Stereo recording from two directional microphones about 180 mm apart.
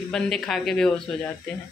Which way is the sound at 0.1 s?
Centre (ahead or behind).